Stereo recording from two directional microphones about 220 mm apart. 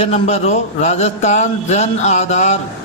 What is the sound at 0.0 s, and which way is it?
A man's voice, 30° left (ahead or behind).